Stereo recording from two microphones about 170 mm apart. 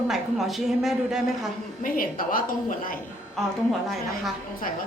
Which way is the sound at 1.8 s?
55° left (ahead or behind).